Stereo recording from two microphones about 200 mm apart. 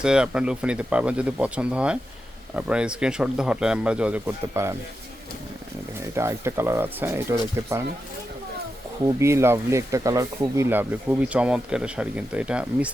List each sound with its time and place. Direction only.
0.0 s speech: 5° right (ahead or behind)
6.1 s speech: 15° right (ahead or behind)
9.0 s speech: 15° right (ahead or behind)